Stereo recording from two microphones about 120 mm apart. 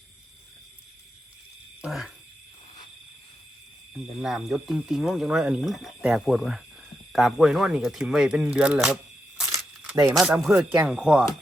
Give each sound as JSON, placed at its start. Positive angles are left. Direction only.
{"t": 1.8, "sound": "frog", "side_deg": -5}
{"t": 3.9, "sound": "speech", "side_deg": 0}
{"t": 9.8, "sound": "a sound", "side_deg": -20}
{"t": 10.5, "sound": "speech", "side_deg": -15}